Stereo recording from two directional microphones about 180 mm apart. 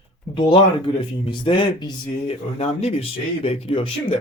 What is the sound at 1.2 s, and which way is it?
Speech, 25° left (ahead or behind).